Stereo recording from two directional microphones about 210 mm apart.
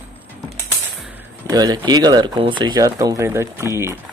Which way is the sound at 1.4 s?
20° right (ahead or behind).